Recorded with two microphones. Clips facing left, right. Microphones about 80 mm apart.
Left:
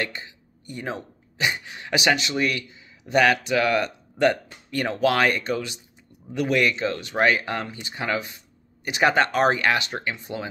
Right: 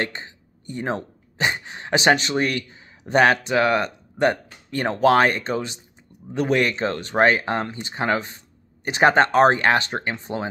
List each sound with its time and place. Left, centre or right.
0.0 s speech: right